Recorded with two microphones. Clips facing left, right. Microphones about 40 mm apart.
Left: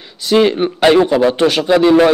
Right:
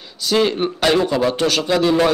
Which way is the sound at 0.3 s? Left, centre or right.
Centre.